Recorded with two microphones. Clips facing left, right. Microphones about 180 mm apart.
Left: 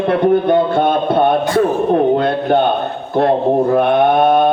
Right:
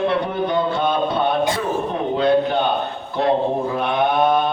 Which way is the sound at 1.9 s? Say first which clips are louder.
Left 4 dB; 55° left (ahead or behind).